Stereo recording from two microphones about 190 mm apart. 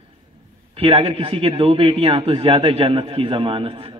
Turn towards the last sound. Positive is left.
turn(degrees=-30)  # may be behind; listen again after turning